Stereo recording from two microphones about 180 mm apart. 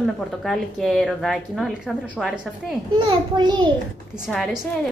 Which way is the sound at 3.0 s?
25° right (ahead or behind).